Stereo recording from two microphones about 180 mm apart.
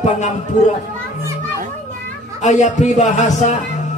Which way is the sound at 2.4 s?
40° left (ahead or behind).